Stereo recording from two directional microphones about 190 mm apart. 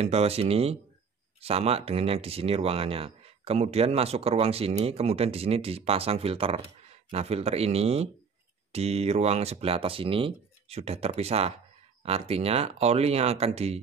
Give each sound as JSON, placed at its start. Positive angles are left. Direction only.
{"t": 0.0, "sound": "speech", "side_deg": -35}